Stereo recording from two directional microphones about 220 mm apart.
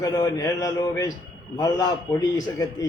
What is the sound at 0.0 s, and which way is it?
A man's voice, 15° left (ahead or behind).